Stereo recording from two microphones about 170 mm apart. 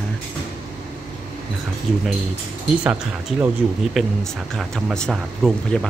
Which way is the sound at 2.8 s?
10° right (ahead or behind).